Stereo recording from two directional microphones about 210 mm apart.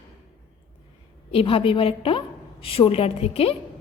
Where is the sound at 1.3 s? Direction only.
25° left (ahead or behind).